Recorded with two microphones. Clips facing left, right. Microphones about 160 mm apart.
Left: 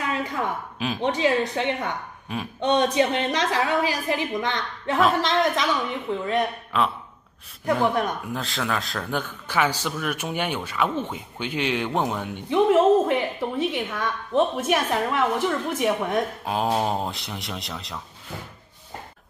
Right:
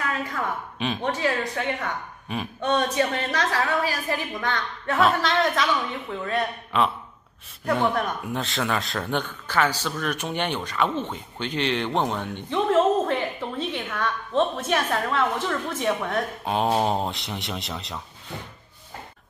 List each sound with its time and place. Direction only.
0.0 s a sound: 20° left (ahead or behind)
0.7 s speech: 5° left (ahead or behind)
1.0 s a woman's voice: 20° left (ahead or behind)
6.7 s speech: centre (ahead or behind)
8.3 s speech: centre (ahead or behind)
16.4 s speech: centre (ahead or behind)